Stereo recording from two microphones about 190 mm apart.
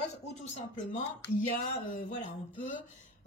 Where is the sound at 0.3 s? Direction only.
40° left (ahead or behind).